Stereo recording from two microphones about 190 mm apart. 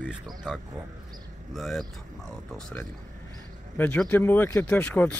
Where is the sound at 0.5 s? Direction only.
5° right (ahead or behind).